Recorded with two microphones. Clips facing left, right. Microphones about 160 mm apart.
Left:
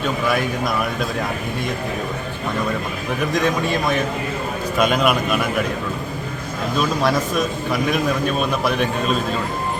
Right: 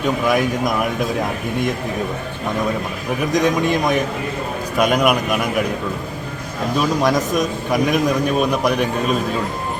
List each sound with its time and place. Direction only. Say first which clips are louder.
0.0 s a man's voice: right 3 dB; 15° right (ahead or behind)
3.3 s a man's voice: right 4 dB; 15° right (ahead or behind)
6.7 s a man's voice: right 2 dB; 15° right (ahead or behind)